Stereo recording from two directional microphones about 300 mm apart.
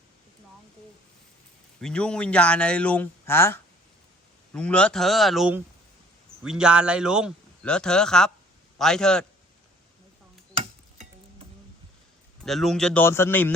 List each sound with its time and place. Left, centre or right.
1.8 s a man's voice: centre
10.6 s tick-tock: right
12.4 s a man's voice: centre